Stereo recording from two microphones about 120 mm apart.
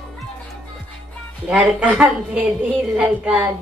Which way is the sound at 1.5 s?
10° right (ahead or behind).